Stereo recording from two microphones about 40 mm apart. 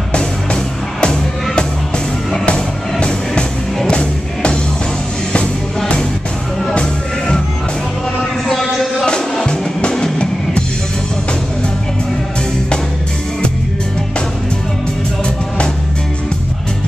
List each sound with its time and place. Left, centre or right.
1.0 s music: left
6.7 s music: left
8.5 s a sound: centre
9.5 s music: left